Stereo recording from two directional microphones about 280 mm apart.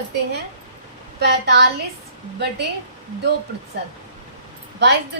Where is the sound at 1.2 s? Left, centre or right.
Right.